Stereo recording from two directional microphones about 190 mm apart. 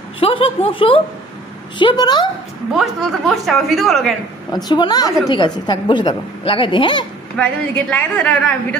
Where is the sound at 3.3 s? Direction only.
Centre (ahead or behind).